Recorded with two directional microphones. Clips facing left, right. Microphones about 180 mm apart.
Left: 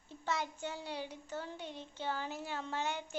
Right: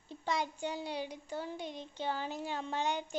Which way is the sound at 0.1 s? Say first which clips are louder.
Right 3 dB; 15° right (ahead or behind).